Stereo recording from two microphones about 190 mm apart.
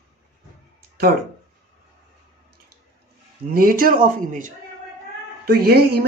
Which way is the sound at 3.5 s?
50° right (ahead or behind).